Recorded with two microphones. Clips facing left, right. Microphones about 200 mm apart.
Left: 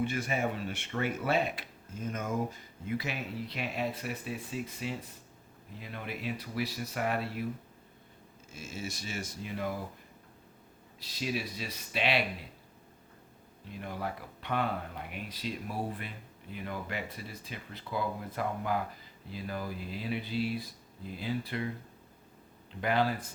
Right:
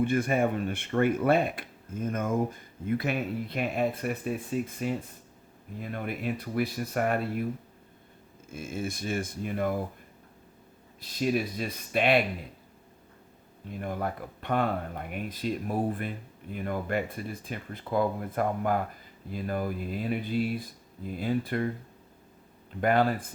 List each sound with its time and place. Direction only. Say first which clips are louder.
0.0 s speech: right 6 dB; 55° right (ahead or behind)
8.4 s speech: right 7 dB; 55° right (ahead or behind)
11.2 s speech: right 7 dB; 50° right (ahead or behind)
13.7 s speech: right 5 dB; 50° right (ahead or behind)
22.8 s speech: right 5 dB; 50° right (ahead or behind)